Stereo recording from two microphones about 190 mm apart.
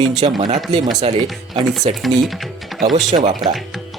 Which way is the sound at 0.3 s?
35° right (ahead or behind).